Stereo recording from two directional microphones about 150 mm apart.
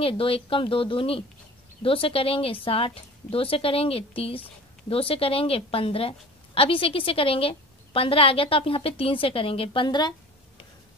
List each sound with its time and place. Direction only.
0.0 s a woman's voice: 40° left (ahead or behind)